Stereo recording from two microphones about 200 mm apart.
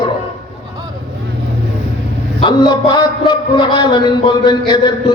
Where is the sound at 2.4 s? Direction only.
20° left (ahead or behind).